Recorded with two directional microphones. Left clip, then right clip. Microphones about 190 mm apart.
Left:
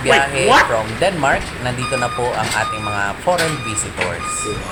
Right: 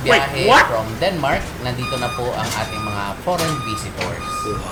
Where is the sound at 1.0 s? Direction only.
25° left (ahead or behind).